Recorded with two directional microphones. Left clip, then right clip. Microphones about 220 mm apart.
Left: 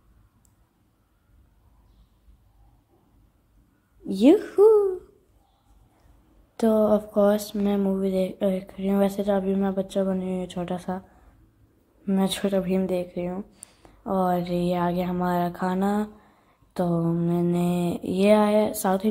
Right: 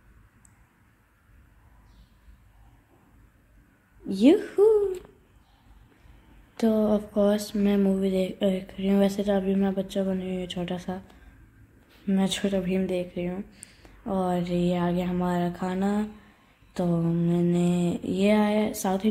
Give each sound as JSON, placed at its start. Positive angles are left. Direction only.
{"t": 4.1, "sound": "a woman's voice", "side_deg": 20}
{"t": 6.6, "sound": "speech", "side_deg": 15}
{"t": 12.1, "sound": "speech", "side_deg": 10}